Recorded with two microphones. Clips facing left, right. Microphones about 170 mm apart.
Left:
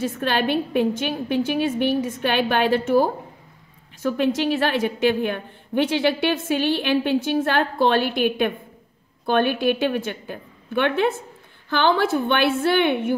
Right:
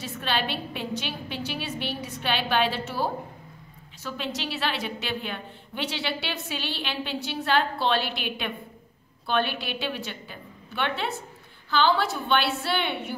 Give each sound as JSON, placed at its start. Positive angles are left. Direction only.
{"t": 0.0, "sound": "a woman's voice", "side_deg": 50}